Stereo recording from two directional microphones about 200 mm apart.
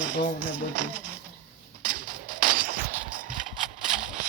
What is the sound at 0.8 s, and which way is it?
Speech, 40° right (ahead or behind).